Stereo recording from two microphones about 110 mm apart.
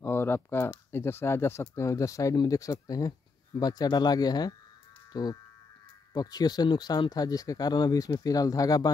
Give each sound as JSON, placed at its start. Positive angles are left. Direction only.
{"t": 0.0, "sound": "speech", "side_deg": 20}